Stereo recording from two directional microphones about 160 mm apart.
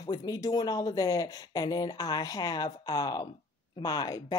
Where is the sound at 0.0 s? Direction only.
25° left (ahead or behind).